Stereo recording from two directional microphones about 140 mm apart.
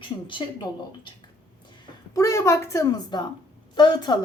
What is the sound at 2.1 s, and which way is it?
A woman's voice, 20° left (ahead or behind).